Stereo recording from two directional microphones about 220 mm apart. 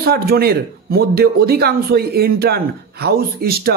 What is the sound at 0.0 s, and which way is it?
A man's voice, 45° right (ahead or behind).